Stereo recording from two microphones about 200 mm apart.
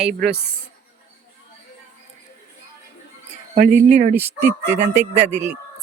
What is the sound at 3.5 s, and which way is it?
Speech, 40° right (ahead or behind).